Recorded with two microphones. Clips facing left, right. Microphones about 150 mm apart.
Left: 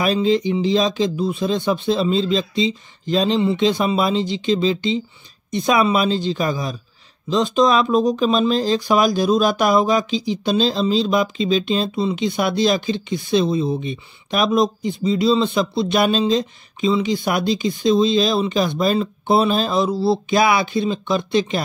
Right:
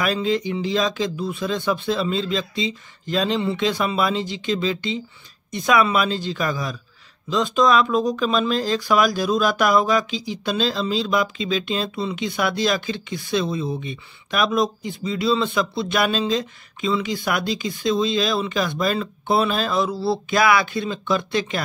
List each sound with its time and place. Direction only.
0.0 s speech: 25° left (ahead or behind)